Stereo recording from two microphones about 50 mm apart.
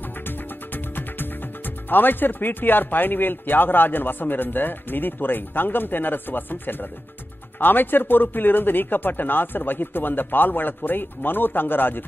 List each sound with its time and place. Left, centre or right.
0.2 s speech: left